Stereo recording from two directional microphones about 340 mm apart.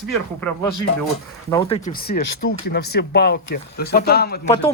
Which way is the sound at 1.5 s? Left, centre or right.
Centre.